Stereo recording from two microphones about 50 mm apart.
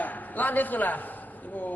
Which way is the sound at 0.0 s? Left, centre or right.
Left.